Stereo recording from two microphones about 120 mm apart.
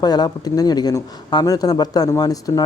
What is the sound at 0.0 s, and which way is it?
Speech, 35° left (ahead or behind).